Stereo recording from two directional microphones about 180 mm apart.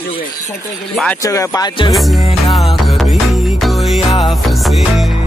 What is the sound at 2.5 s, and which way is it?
Music, centre (ahead or behind).